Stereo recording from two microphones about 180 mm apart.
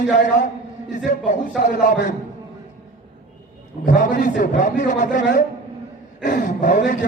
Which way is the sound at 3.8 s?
45° left (ahead or behind).